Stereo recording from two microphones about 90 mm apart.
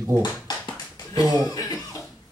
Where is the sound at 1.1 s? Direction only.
45° left (ahead or behind).